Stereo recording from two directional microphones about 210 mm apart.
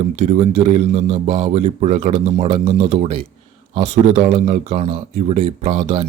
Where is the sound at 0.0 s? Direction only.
30° right (ahead or behind).